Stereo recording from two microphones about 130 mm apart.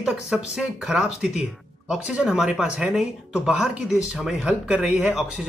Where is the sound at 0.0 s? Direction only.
5° right (ahead or behind).